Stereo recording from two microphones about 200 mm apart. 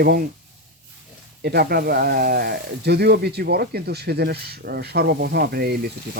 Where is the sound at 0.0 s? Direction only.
50° right (ahead or behind).